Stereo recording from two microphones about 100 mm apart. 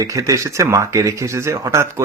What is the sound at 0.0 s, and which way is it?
Speech, 30° right (ahead or behind).